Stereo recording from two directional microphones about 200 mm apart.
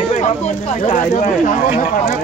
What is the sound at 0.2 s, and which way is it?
Speech, 35° left (ahead or behind).